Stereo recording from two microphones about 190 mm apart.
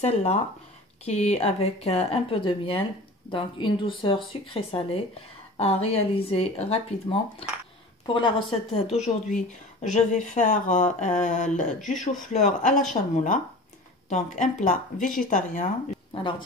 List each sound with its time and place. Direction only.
0.0 s speech: 35° left (ahead or behind)
8.9 s speech: 35° left (ahead or behind)
16.1 s speech: 25° left (ahead or behind)